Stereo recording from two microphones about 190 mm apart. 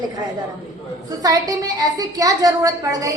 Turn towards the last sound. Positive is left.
turn(degrees=-20)  # may be behind; listen again after turning